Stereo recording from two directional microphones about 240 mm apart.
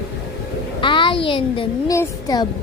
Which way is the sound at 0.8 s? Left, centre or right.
Centre.